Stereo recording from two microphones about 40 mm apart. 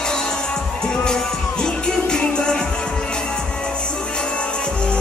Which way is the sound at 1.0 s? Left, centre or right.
Centre.